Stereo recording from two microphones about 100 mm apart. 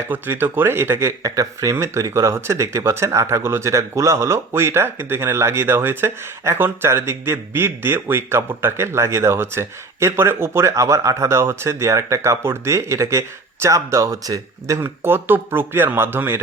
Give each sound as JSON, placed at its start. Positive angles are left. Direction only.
{"t": 0.1, "sound": "speech", "side_deg": -20}